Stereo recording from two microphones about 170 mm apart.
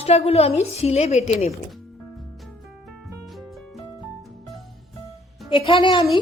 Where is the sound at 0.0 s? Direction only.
35° left (ahead or behind).